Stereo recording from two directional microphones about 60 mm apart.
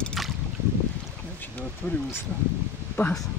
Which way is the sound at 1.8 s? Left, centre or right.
Left.